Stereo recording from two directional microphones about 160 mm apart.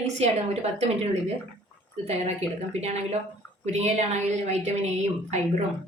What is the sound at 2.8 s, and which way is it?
A woman's voice, 45° right (ahead or behind).